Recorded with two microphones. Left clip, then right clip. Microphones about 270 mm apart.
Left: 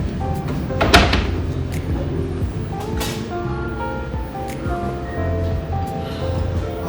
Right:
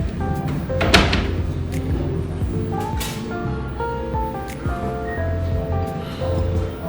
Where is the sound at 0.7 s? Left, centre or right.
Left.